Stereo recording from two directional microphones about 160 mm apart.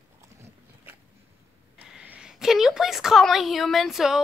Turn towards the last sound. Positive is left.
turn(degrees=0)  # may be behind; listen again after turning